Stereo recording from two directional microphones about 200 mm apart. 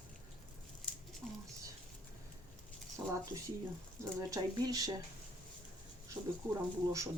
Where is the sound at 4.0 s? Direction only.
15° right (ahead or behind).